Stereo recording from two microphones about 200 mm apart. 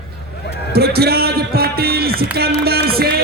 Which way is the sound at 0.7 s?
50° right (ahead or behind).